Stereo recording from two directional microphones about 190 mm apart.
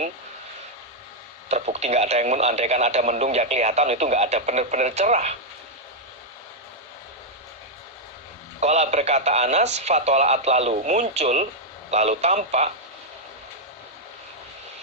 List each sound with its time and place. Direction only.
1.5 s speech: 35° right (ahead or behind)
8.6 s speech: 35° right (ahead or behind)